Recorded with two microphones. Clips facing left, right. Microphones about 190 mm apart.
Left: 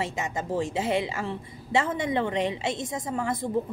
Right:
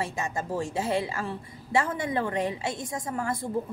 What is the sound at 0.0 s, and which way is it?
A woman's voice, 20° left (ahead or behind).